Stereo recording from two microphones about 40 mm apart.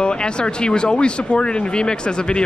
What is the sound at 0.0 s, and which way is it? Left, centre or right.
Speech, left.